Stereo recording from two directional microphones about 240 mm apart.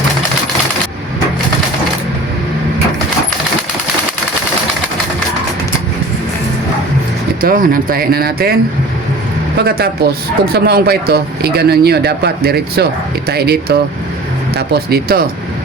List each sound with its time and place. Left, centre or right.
7.4 s speech: right
9.6 s speech: right